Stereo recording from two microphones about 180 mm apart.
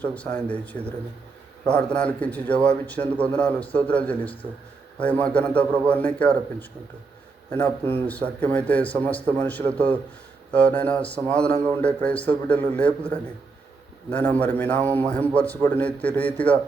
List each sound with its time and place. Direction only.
0.0 s speech: 10° left (ahead or behind)
11.5 s a man's voice: 20° right (ahead or behind)
11.8 s speech: 5° left (ahead or behind)
14.1 s speech: 10° left (ahead or behind)